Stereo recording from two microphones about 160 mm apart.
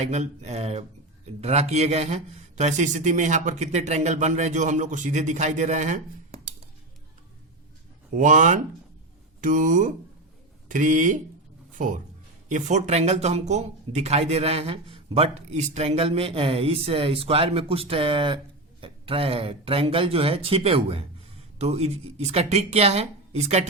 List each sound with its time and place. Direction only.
0.0 s speech: 45° right (ahead or behind)
8.1 s speech: 50° right (ahead or behind)
12.5 s speech: 50° right (ahead or behind)